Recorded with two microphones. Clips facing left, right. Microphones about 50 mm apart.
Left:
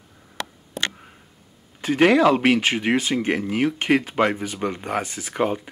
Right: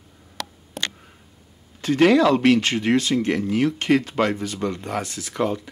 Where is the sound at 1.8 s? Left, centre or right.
Centre.